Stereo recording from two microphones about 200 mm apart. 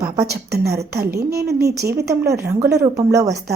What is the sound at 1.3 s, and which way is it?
Speech, 15° right (ahead or behind).